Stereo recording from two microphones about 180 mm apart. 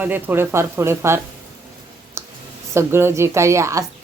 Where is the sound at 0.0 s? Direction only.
10° right (ahead or behind).